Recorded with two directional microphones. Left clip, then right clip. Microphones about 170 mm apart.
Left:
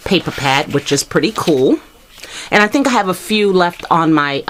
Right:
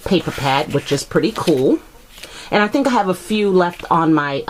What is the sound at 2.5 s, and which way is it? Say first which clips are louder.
Speech: left 4 dB; 20° left (ahead or behind).